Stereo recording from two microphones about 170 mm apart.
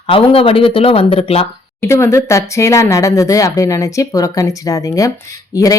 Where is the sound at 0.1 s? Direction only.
30° left (ahead or behind).